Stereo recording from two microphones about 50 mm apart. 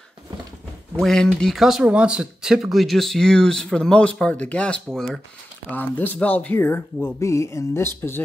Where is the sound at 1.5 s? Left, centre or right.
Centre.